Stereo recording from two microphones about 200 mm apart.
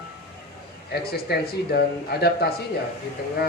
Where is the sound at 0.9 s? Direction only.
50° left (ahead or behind).